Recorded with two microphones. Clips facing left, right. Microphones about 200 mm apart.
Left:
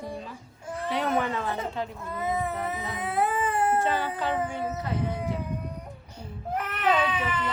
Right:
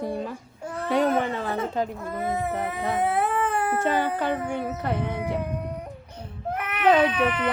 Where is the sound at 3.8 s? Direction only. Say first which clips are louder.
Right 3 dB; 55° right (ahead or behind).